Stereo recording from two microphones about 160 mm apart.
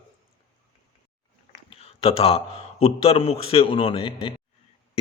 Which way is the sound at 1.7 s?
40° left (ahead or behind).